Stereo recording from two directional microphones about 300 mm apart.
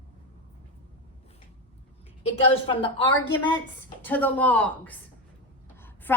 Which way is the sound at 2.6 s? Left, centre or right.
Centre.